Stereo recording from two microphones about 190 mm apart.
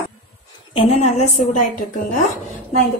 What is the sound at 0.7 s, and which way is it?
Speech, 35° left (ahead or behind).